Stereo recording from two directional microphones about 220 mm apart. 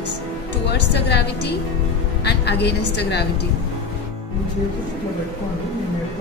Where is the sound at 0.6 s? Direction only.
50° left (ahead or behind).